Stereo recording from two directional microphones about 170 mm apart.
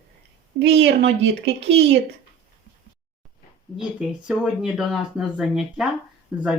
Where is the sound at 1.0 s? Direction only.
90° right.